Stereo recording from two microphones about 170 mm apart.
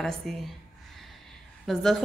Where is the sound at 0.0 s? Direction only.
Centre (ahead or behind).